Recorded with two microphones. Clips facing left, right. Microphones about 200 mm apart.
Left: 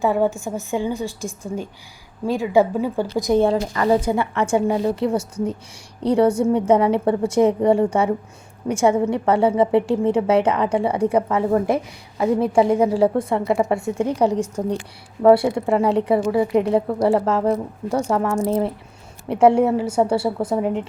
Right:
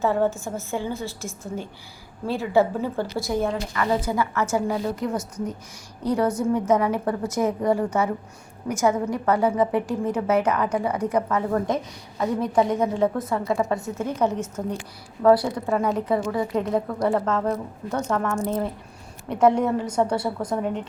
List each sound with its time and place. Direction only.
0.0 s a woman's voice: 15° left (ahead or behind)
3.4 s a woman's voice: 35° left (ahead or behind); by 14.6 s 15° left (ahead or behind)
15.2 s a woman's voice: 25° left (ahead or behind)